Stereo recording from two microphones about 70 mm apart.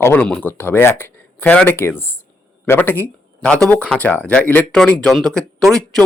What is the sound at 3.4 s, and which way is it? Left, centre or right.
Speech, centre.